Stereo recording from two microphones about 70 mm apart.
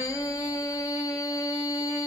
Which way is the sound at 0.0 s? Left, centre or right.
Left.